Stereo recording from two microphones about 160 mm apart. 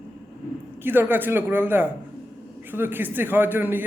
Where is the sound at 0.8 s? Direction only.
10° right (ahead or behind).